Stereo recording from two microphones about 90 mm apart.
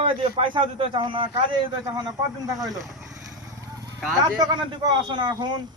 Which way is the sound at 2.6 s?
40° right (ahead or behind).